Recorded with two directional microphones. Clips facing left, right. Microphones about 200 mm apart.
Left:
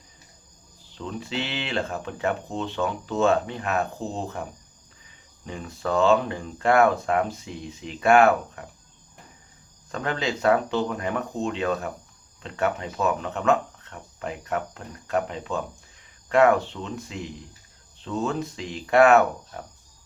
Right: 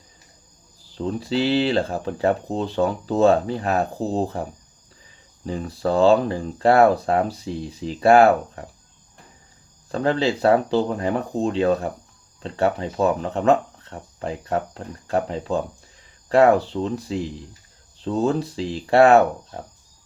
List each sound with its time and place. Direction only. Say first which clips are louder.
0.9 s speech: right 8 dB; 35° right (ahead or behind)
5.5 s speech: right 5 dB; 35° right (ahead or behind)
9.9 s speech: right 7 dB; 30° right (ahead or behind)